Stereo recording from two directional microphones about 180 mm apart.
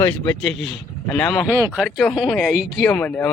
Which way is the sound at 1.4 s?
15° right (ahead or behind).